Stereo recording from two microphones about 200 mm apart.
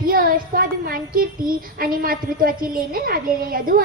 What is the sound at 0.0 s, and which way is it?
Speech, 45° right (ahead or behind).